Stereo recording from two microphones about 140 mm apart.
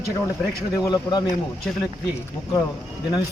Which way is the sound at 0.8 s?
30° left (ahead or behind).